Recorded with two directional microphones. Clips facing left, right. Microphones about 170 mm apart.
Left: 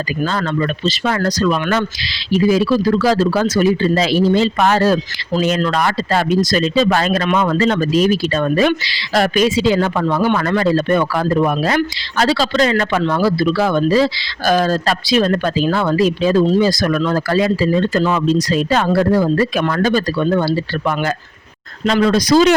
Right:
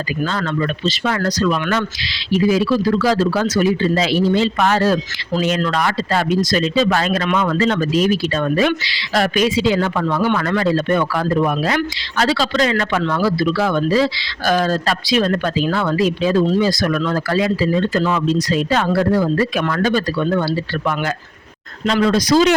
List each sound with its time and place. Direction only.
0.3 s speech: 40° left (ahead or behind)